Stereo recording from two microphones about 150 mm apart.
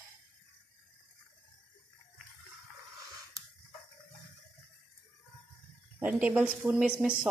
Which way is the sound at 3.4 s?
20° right (ahead or behind).